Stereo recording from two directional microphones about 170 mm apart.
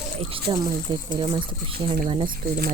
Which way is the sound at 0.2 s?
35° right (ahead or behind).